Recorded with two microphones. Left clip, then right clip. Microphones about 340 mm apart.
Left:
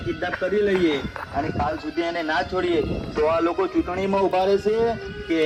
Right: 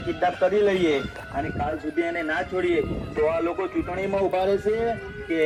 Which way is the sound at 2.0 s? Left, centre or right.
Centre.